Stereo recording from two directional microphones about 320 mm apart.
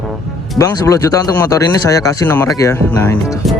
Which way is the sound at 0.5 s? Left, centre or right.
Centre.